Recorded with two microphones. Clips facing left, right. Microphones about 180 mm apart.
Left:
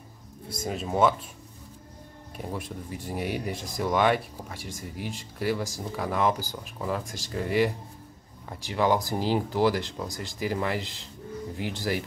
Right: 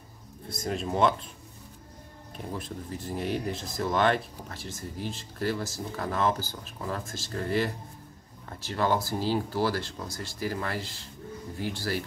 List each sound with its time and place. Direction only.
0.5 s speech: 5° left (ahead or behind)
2.3 s speech: 10° left (ahead or behind)